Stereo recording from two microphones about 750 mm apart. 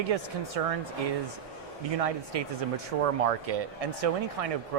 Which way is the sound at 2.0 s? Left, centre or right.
Right.